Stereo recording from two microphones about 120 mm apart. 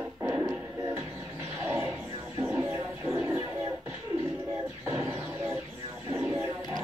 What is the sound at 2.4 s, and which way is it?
Music, 15° right (ahead or behind).